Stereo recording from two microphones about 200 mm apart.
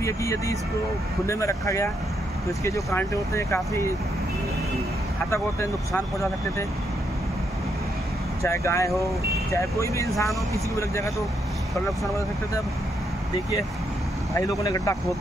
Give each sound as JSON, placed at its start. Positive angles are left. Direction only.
{"t": 0.0, "sound": "speech", "side_deg": 15}
{"t": 5.3, "sound": "speech", "side_deg": 15}
{"t": 8.4, "sound": "speech", "side_deg": 15}
{"t": 14.3, "sound": "speech", "side_deg": 15}